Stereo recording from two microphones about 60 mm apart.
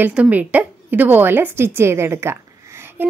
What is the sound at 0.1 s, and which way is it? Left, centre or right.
A woman's voice, right.